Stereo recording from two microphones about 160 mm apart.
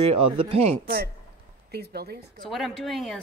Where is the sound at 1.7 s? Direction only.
85° right.